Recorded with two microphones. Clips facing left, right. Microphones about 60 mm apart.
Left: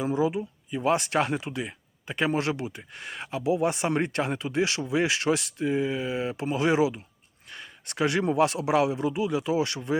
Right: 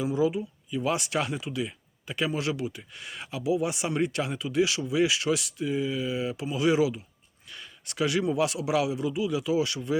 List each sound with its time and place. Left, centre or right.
0.0 s speech: left
7.5 s a sound: left
8.3 s speech: left